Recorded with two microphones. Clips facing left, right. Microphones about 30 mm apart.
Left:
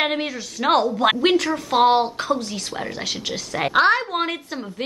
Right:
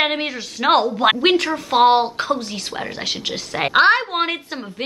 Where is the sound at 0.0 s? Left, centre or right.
Right.